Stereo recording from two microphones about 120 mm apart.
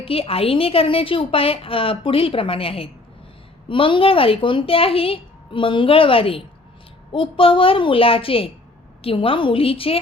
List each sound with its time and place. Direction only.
0.0 s a woman's voice: 50° left (ahead or behind)